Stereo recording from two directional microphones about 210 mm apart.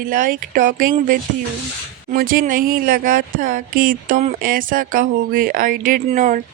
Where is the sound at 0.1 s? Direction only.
40° right (ahead or behind).